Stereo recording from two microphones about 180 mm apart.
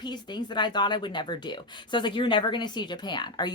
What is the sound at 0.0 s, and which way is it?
Speech, 25° left (ahead or behind).